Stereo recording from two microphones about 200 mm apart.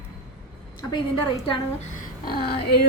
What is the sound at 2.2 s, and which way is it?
Speech, 50° left (ahead or behind).